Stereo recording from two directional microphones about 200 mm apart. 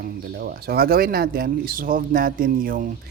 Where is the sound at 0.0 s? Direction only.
50° right (ahead or behind).